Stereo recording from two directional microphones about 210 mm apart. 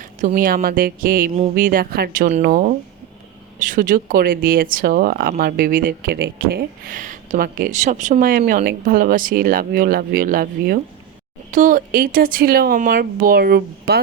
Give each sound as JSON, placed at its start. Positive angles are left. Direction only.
{"t": 0.0, "sound": "speech", "side_deg": -40}